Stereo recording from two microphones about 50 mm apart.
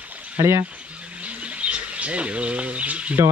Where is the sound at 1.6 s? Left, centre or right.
Right.